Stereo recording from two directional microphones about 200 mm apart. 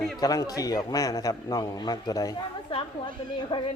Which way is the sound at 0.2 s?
20° left (ahead or behind).